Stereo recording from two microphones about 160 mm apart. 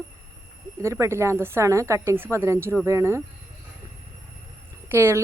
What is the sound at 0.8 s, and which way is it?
Speech, 20° right (ahead or behind).